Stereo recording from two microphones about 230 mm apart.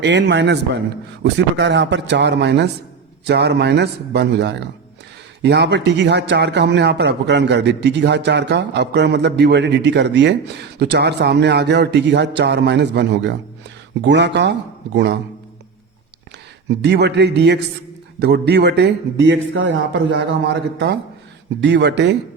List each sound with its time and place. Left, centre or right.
0.0 s a man's voice: right
16.8 s a man's voice: right